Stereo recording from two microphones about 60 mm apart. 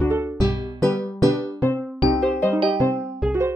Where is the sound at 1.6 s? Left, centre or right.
Left.